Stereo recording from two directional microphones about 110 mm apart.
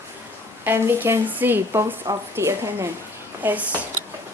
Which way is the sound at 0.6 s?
20° right (ahead or behind).